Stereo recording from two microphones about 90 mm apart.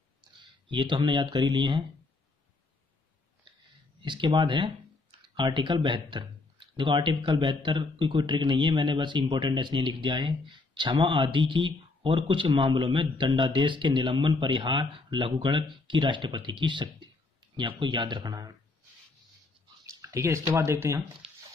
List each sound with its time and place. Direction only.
0.4 s speech: 60° right (ahead or behind)
4.0 s speech: 60° right (ahead or behind); by 18.5 s 45° right (ahead or behind)
19.9 s speech: 35° right (ahead or behind)
21.2 s a sound: 90° right